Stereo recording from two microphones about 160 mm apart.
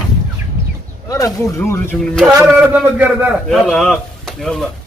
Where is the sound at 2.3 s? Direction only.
15° right (ahead or behind).